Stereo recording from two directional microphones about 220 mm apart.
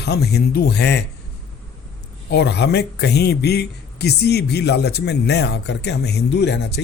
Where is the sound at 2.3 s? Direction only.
50° left (ahead or behind).